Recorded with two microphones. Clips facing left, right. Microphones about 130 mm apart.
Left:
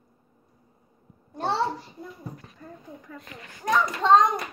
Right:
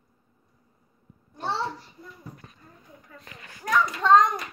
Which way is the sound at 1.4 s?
55° left (ahead or behind).